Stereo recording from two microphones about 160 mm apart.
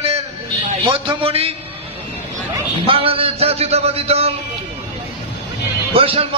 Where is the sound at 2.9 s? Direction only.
35° right (ahead or behind).